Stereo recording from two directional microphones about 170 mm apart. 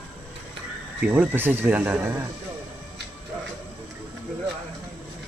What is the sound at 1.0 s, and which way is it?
Speech, 10° right (ahead or behind).